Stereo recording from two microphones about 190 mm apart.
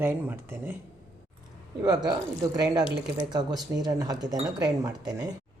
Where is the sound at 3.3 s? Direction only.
20° right (ahead or behind).